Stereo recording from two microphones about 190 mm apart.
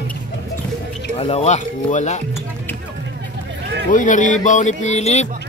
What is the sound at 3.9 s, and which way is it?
Speech, 45° left (ahead or behind).